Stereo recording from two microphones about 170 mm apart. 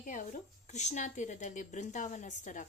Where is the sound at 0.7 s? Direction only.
45° left (ahead or behind).